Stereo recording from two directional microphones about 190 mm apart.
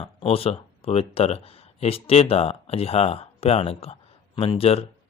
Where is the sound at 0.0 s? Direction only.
30° left (ahead or behind).